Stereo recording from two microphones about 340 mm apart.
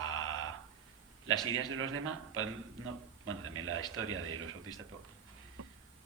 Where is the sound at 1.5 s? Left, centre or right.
Right.